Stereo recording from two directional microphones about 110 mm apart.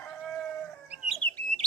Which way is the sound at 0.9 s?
5° right (ahead or behind).